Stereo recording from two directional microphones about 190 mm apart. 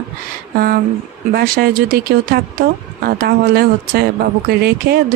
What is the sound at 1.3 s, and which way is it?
Speech, 50° right (ahead or behind).